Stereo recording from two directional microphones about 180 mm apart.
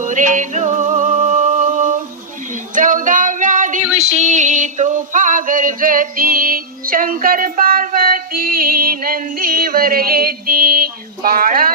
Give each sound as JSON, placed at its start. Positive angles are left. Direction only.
{"t": 0.0, "sound": "music", "side_deg": -45}
{"t": 2.5, "sound": "female singing", "side_deg": -45}
{"t": 3.9, "sound": "a sound", "side_deg": -40}